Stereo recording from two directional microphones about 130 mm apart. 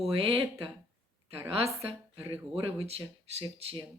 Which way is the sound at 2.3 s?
50° right (ahead or behind).